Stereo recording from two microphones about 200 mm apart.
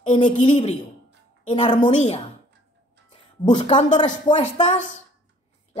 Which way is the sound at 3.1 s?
25° left (ahead or behind).